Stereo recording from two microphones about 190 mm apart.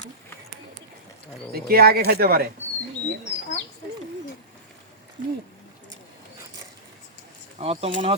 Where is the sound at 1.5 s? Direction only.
55° right (ahead or behind).